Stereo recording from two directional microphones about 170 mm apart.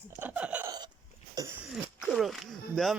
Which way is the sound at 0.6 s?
25° right (ahead or behind).